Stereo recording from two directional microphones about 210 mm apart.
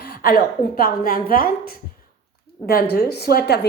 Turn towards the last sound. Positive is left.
turn(degrees=50)  # may be behind; listen again after turning